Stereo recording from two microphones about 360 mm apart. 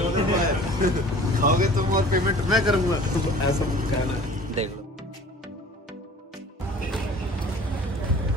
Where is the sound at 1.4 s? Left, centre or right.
Right.